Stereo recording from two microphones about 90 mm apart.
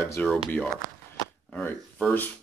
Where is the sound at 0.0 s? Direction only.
30° left (ahead or behind).